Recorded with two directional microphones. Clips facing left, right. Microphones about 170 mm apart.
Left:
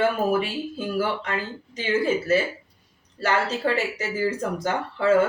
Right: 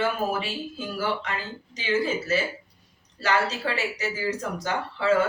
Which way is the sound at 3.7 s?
50° left (ahead or behind).